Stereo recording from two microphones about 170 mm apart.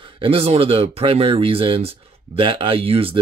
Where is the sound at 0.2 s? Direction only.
35° right (ahead or behind).